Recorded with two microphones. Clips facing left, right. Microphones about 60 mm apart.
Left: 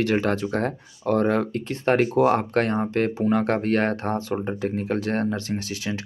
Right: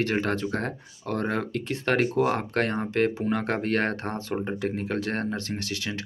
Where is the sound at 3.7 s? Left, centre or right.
Left.